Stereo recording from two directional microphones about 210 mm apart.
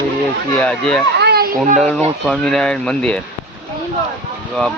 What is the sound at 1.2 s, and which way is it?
Children playing, 50° right (ahead or behind).